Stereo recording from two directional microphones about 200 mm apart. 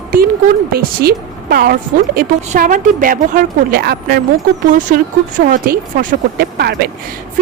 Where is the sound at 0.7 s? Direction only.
50° right (ahead or behind).